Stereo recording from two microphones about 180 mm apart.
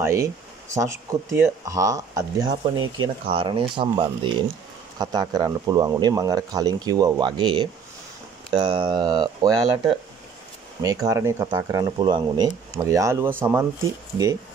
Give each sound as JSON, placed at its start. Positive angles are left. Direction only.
{"t": 0.0, "sound": "speech", "side_deg": -15}